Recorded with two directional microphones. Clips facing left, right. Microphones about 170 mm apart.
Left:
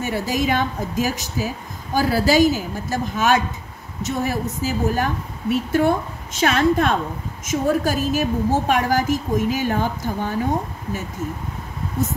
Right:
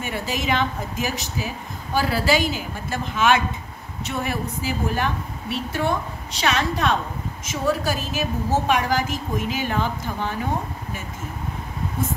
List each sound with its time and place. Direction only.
0.0 s a woman's voice: 45° left (ahead or behind)